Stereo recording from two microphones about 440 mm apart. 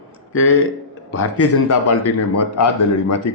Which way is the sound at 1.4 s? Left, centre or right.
Left.